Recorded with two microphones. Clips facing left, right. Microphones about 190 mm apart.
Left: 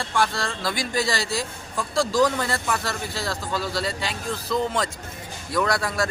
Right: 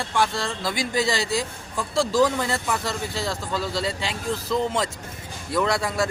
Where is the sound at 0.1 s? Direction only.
20° right (ahead or behind).